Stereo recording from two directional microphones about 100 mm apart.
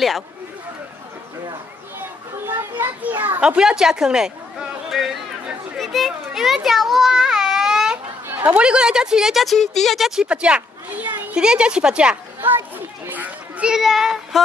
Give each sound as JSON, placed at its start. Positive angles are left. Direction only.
{"t": 2.0, "sound": "children playing", "side_deg": -25}
{"t": 5.8, "sound": "baby cry", "side_deg": 0}
{"t": 8.3, "sound": "a sound", "side_deg": -20}
{"t": 8.5, "sound": "speech", "side_deg": -10}
{"t": 12.4, "sound": "a child's voice", "side_deg": -20}